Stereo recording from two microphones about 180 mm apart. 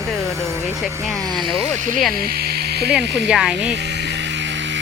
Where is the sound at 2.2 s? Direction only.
60° right (ahead or behind).